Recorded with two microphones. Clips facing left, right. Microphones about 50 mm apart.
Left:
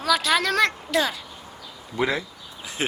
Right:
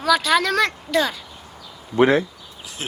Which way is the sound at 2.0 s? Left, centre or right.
Right.